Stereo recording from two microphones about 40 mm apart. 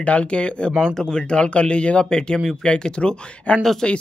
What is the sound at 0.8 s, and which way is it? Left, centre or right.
Speech, centre.